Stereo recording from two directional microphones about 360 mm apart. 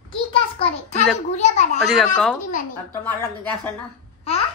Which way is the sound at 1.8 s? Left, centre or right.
Centre.